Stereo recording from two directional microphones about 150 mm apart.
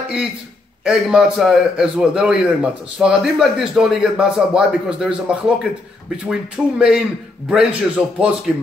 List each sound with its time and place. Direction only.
0.8 s a man's voice: 5° right (ahead or behind)